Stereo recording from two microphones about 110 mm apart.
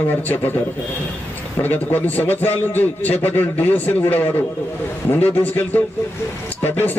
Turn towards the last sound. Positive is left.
turn(degrees=20)  # may be behind; listen again after turning